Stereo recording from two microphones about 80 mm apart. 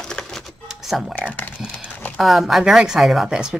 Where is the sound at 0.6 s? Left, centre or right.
Centre.